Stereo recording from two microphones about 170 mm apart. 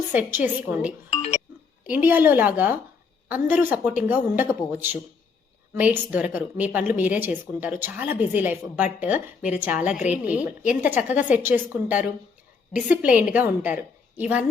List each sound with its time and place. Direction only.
0.1 s a woman's voice: 10° right (ahead or behind)
1.1 s music: 40° left (ahead or behind)
1.9 s a woman's voice: 10° right (ahead or behind)